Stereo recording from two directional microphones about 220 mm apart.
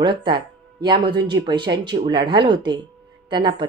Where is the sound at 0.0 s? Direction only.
20° right (ahead or behind).